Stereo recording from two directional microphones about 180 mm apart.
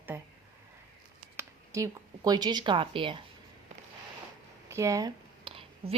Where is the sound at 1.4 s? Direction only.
15° right (ahead or behind).